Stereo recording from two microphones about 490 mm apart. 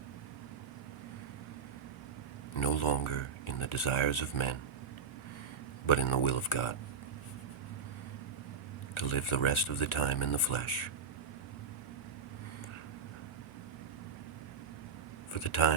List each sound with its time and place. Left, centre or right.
2.6 s speech: left
5.8 s speech: left
9.0 s speech: left
15.3 s speech: left